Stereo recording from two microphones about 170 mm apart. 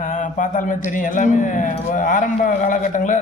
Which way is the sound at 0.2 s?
50° left (ahead or behind).